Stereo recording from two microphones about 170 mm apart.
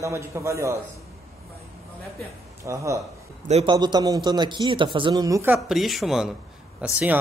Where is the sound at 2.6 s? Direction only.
20° right (ahead or behind).